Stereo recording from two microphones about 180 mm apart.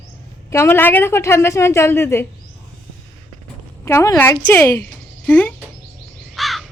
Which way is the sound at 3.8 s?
15° left (ahead or behind).